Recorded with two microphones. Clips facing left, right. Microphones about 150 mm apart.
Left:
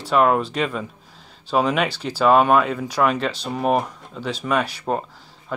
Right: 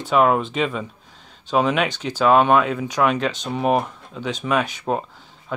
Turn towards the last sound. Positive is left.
turn(degrees=0)  # may be behind; listen again after turning